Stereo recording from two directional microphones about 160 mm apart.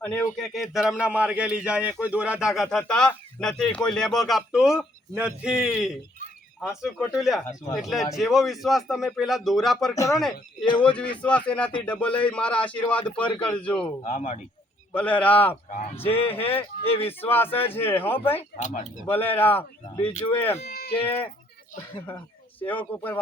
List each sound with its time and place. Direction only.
0.0 s a man's voice: 10° left (ahead or behind)
14.0 s speech: 40° left (ahead or behind)
14.9 s a man's voice: 10° left (ahead or behind)
15.7 s speech: 35° left (ahead or behind)
16.1 s a man's voice: 10° left (ahead or behind)
16.8 s speech: 35° left (ahead or behind)
17.1 s a man's voice: 15° left (ahead or behind)
18.3 s speech: 45° left (ahead or behind)
19.0 s a man's voice: 15° left (ahead or behind)
20.7 s a sound: 75° left (ahead or behind)
21.0 s a man's voice: 15° left (ahead or behind)
22.6 s a man's voice: 10° left (ahead or behind)